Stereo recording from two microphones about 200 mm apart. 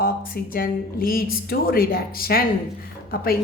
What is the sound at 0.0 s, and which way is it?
Speech, 45° left (ahead or behind).